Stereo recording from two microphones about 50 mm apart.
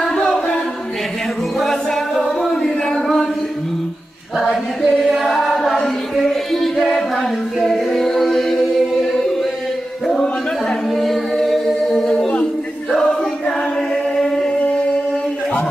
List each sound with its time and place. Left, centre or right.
0.0 s choir: centre
1.6 s music: centre
2.4 s chant: centre
4.8 s chant: centre
7.6 s a capella: centre
11.0 s music: centre
14.1 s a sound: centre